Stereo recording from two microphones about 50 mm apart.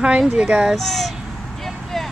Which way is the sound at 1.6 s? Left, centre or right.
Centre.